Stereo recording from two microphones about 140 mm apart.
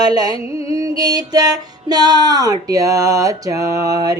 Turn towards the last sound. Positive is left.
turn(degrees=-25)  # may be behind; listen again after turning